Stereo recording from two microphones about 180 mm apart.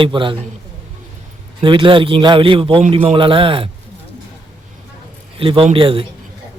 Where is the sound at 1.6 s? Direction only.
25° right (ahead or behind).